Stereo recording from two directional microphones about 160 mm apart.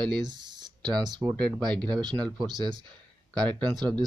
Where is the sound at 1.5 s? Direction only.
5° left (ahead or behind).